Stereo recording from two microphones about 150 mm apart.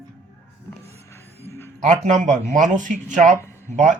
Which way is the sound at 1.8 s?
50° right (ahead or behind).